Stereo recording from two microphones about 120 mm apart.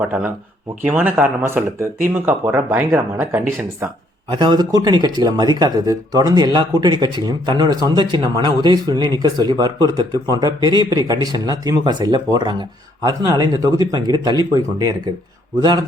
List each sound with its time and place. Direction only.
0.9 s speech: 15° right (ahead or behind)
4.3 s speech: 40° right (ahead or behind)